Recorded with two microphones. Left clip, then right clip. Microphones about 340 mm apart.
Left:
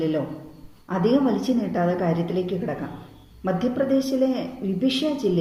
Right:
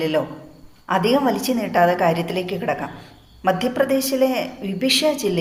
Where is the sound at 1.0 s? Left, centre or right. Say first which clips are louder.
Even; right.